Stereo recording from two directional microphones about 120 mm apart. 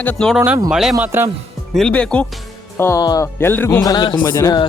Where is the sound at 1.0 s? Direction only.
20° right (ahead or behind).